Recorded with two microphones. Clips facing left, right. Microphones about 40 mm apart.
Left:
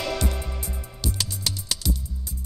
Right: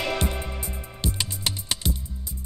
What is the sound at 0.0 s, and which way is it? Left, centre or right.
Music, right.